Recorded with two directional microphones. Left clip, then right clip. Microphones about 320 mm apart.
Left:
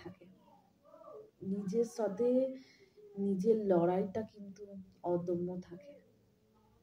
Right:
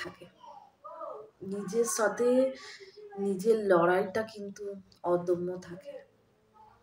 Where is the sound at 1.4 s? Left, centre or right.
Left.